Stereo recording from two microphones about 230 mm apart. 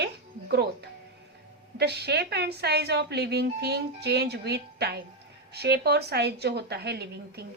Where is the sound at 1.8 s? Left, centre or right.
Right.